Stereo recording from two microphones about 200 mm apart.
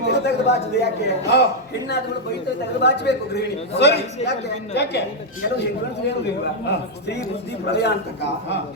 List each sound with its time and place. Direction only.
0.1 s a man's voice: 55° left (ahead or behind)
2.8 s a man's voice: 55° left (ahead or behind)
6.7 s a man's voice: 55° left (ahead or behind)